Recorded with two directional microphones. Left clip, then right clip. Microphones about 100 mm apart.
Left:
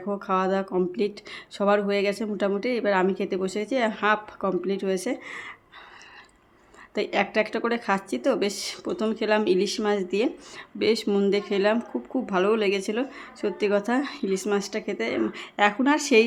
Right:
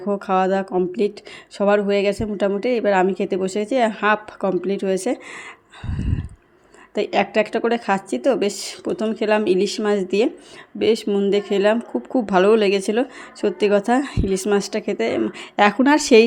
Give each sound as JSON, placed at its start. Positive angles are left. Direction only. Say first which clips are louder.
{"t": 0.0, "sound": "a woman's voice", "louder": "right 6 dB", "side_deg": -40}
{"t": 6.9, "sound": "a woman's voice", "louder": "right 5 dB", "side_deg": -35}
{"t": 10.8, "sound": "speech", "louder": "right 4 dB", "side_deg": -25}
{"t": 11.3, "sound": "a woman's voice", "louder": "right 7 dB", "side_deg": -35}
{"t": 12.1, "sound": "a woman's voice", "louder": "right 8 dB", "side_deg": -55}